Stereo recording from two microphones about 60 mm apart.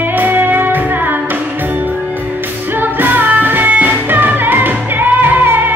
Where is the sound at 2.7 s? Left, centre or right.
Right.